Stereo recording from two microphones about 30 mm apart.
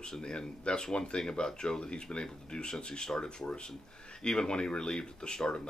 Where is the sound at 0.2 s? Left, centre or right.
Left.